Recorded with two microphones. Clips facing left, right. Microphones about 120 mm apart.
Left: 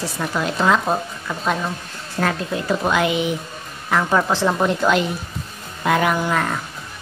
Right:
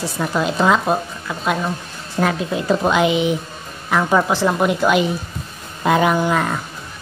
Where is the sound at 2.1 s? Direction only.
15° right (ahead or behind).